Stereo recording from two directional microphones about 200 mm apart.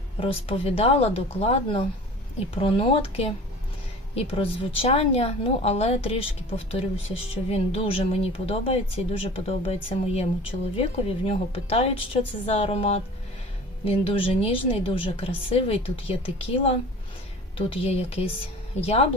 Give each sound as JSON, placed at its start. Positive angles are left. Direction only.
{"t": 0.2, "sound": "a woman's voice", "side_deg": 30}